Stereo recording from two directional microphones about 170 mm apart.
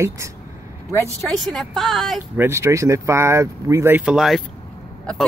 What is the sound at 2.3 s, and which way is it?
Speech, 15° right (ahead or behind).